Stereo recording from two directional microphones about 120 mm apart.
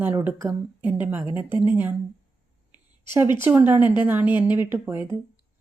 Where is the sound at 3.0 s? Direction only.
20° right (ahead or behind).